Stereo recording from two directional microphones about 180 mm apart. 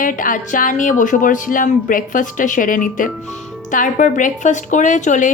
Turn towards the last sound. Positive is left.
turn(degrees=45)  # may be behind; listen again after turning